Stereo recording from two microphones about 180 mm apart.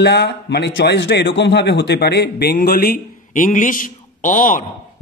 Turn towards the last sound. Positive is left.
turn(degrees=50)  # may be behind; listen again after turning